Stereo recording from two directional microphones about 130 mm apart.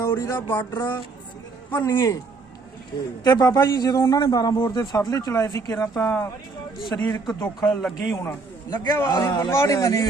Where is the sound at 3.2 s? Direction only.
30° left (ahead or behind).